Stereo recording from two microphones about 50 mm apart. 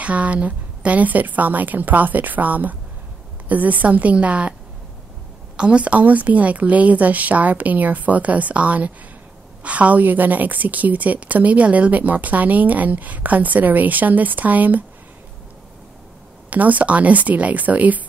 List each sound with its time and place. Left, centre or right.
0.0 s a woman's voice: right
5.6 s a woman's voice: right
16.4 s a woman's voice: right